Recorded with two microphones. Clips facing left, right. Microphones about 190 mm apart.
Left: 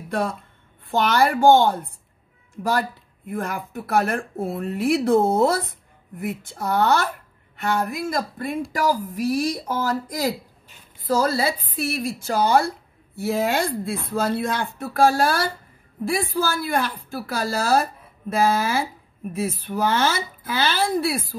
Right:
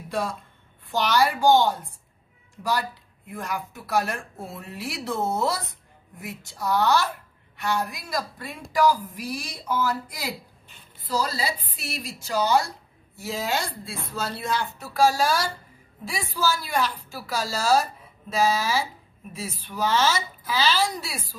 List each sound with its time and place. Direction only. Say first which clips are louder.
0.1 s a woman's voice: left 4 dB; 55° left (ahead or behind)
3.3 s a woman's voice: left 4 dB; 55° left (ahead or behind)
11.1 s a woman's voice: left 6 dB; 50° left (ahead or behind)